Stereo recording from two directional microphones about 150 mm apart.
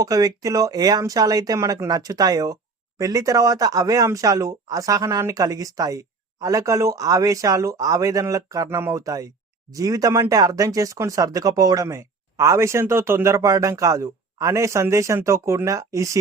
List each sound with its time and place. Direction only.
0.0 s speech: 25° right (ahead or behind)